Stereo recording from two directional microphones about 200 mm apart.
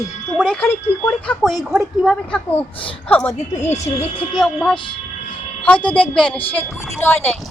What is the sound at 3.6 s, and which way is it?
Speech, 35° left (ahead or behind).